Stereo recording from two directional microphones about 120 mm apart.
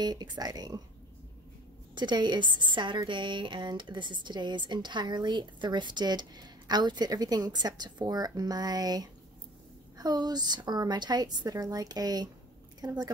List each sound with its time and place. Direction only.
0.0 s a woman's voice: 35° right (ahead or behind)
2.0 s a woman's voice: 40° right (ahead or behind)